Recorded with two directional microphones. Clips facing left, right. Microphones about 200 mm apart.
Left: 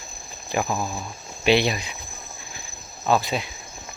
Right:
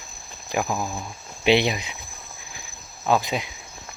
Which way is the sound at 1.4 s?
20° right (ahead or behind).